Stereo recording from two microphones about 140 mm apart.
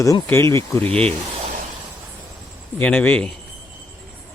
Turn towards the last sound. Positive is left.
turn(degrees=10)  # may be behind; listen again after turning